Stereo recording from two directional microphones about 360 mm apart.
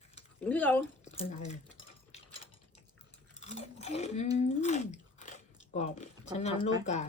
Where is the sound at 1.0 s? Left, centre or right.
Centre.